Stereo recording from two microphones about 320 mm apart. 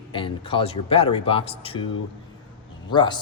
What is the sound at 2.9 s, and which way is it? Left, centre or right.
Speech, centre.